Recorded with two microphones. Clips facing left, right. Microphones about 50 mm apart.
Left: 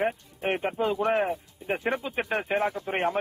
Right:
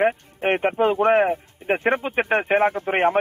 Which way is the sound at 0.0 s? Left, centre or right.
Right.